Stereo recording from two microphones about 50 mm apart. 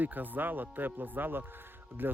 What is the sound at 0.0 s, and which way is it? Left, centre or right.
Speech, right.